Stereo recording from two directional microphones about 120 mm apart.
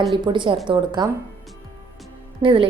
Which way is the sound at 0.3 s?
40° right (ahead or behind).